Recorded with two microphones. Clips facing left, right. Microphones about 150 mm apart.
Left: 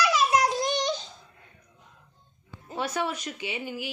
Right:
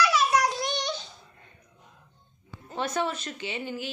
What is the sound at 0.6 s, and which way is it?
Child singing, 45° left (ahead or behind).